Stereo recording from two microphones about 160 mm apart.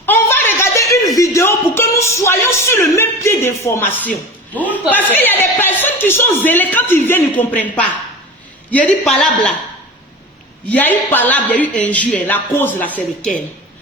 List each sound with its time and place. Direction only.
0.0 s a sound: 10° left (ahead or behind)
4.7 s speech: 10° left (ahead or behind)
8.7 s speech: 10° left (ahead or behind)
10.7 s speech: 10° left (ahead or behind)